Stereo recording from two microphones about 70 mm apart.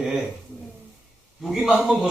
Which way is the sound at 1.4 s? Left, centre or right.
Centre.